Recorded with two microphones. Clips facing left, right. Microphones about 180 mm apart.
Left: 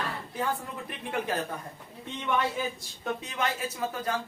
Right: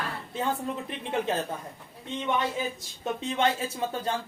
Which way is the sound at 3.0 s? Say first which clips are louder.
Right 5 dB; 25° right (ahead or behind).